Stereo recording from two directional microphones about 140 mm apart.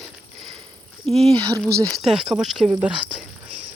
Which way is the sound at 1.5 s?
25° right (ahead or behind).